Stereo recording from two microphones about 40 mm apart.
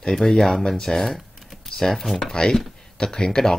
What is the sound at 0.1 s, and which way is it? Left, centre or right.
Speech, centre.